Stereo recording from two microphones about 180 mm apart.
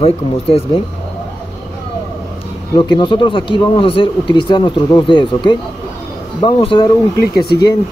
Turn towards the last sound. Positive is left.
turn(degrees=20)  # may be behind; listen again after turning